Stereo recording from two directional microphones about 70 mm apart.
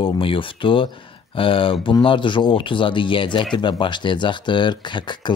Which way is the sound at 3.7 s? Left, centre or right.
Left.